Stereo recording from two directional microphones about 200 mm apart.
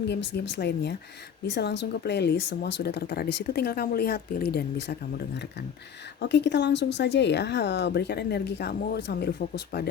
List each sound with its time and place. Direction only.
0.1 s speech: 60° left (ahead or behind)
6.1 s speech: 60° left (ahead or behind)